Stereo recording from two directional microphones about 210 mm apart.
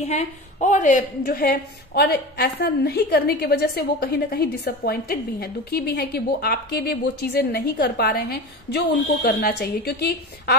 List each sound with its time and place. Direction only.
0.0 s a woman's voice: 30° left (ahead or behind); by 10.5 s 50° left (ahead or behind)